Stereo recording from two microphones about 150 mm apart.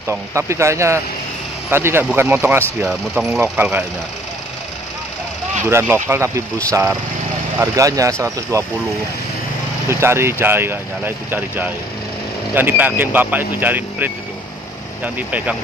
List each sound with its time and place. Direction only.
0.1 s speech: 20° right (ahead or behind)
5.7 s speech: 15° right (ahead or behind)
9.8 s speech: 20° right (ahead or behind)
15.1 s speech: 10° right (ahead or behind)